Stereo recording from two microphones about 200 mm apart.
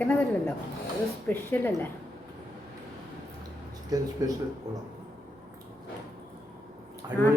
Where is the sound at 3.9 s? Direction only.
20° right (ahead or behind).